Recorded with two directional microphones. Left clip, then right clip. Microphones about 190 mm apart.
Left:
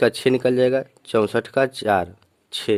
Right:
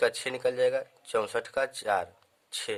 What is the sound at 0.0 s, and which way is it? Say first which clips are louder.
Speech: left 9 dB; 35° left (ahead or behind).